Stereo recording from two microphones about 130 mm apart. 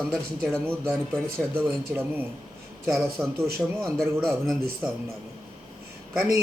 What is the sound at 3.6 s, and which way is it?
Speech, centre (ahead or behind).